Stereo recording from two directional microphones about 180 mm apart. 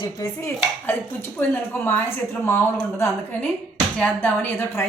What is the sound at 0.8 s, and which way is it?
A woman's voice, 10° left (ahead or behind).